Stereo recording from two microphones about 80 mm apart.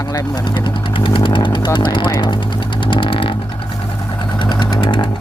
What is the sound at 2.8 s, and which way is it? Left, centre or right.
Vehicle, left.